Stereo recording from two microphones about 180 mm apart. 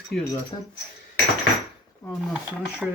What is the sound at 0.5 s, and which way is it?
Speech, 25° left (ahead or behind).